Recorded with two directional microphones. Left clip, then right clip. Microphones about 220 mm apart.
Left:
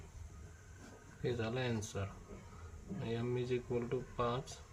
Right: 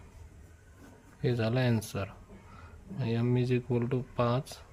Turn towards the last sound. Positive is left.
turn(degrees=-50)  # may be behind; listen again after turning